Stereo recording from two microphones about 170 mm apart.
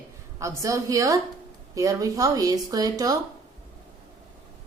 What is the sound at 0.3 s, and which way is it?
Speech, 20° right (ahead or behind).